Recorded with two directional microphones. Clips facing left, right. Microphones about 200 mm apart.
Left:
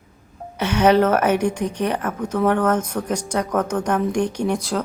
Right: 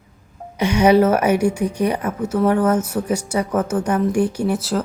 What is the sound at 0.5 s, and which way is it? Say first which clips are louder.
A woman's voice: right 2 dB; 10° right (ahead or behind).